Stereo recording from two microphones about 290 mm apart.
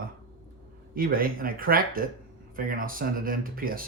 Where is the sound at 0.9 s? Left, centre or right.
Right.